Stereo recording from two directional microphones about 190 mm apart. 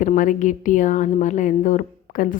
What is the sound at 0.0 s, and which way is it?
A woman's voice, 45° left (ahead or behind).